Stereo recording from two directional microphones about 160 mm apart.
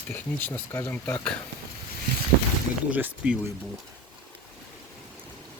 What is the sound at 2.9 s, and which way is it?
Speech, 10° right (ahead or behind).